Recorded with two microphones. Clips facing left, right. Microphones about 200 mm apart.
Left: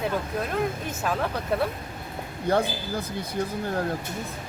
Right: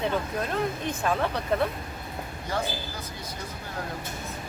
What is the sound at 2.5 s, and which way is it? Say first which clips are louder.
Speech: left 8 dB; 55° left (ahead or behind).